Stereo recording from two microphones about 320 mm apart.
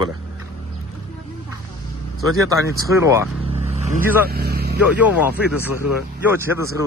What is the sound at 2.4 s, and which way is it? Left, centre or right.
Speech, centre.